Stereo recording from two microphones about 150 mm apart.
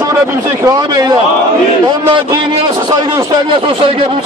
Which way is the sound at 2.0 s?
30° right (ahead or behind).